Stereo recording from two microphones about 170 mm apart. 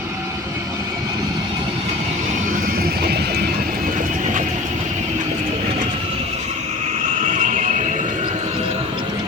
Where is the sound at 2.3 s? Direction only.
50° right (ahead or behind).